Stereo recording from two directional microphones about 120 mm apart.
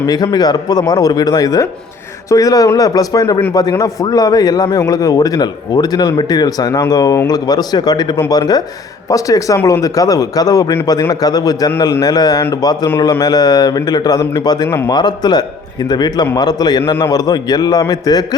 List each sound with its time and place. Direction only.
0.1 s a man's voice: 35° left (ahead or behind)